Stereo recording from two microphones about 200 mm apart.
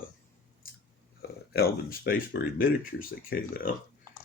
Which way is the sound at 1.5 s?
50° left (ahead or behind).